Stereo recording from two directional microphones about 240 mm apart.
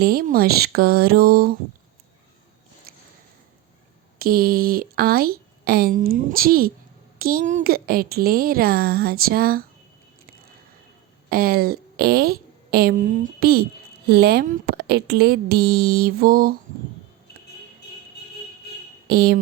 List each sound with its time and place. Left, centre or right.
0.0 s speech: right
2.9 s a sound: right
4.2 s speech: right
11.3 s a woman's voice: right
19.0 s speech: right